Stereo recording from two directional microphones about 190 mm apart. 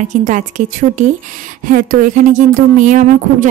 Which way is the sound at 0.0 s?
40° right (ahead or behind).